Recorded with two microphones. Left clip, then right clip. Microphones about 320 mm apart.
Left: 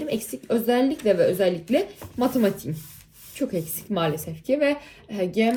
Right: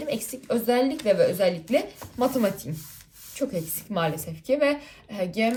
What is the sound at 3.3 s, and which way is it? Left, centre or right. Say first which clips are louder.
Speech: left 1 dB; centre.